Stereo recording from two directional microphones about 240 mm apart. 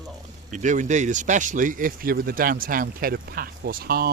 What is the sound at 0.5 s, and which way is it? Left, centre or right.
Speech, right.